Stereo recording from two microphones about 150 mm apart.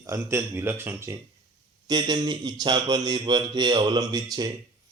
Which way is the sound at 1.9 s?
30° right (ahead or behind).